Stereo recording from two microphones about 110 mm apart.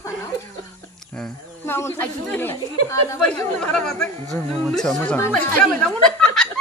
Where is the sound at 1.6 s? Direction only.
20° left (ahead or behind).